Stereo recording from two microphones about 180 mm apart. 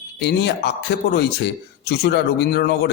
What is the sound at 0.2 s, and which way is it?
A man's voice, 70° left (ahead or behind).